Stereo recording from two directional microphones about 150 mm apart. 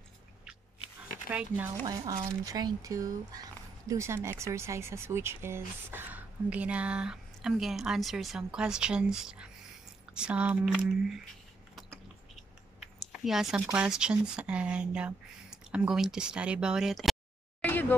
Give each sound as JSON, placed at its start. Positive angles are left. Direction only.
{"t": 1.9, "sound": "speech", "side_deg": -25}
{"t": 13.0, "sound": "speech", "side_deg": 0}
{"t": 17.6, "sound": "a sound", "side_deg": 15}